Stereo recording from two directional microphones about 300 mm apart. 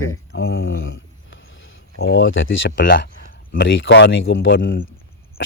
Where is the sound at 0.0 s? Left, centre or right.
Left.